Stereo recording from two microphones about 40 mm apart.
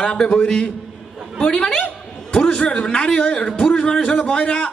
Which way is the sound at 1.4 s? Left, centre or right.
Centre.